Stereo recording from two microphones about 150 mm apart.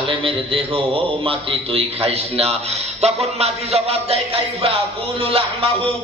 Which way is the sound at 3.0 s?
45° right (ahead or behind).